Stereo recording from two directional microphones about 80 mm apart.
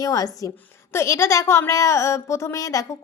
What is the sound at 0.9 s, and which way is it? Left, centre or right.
A woman's voice, left.